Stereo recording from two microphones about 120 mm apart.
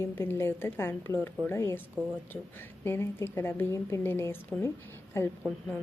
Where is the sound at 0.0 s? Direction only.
20° left (ahead or behind).